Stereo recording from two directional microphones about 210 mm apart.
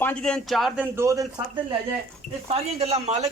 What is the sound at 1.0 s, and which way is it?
Speech, 15° right (ahead or behind).